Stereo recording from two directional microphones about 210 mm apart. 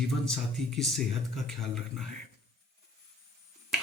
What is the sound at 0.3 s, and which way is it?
A man's voice, centre (ahead or behind).